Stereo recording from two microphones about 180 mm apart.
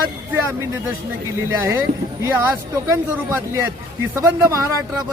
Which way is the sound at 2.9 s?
15° right (ahead or behind).